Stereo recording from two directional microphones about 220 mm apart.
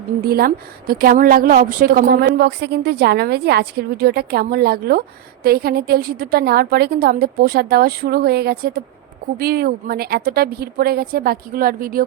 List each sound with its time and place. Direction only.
0.2 s a woman's voice: 45° right (ahead or behind)